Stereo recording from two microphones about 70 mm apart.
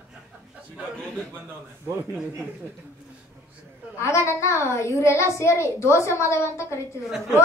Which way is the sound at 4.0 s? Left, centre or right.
Left.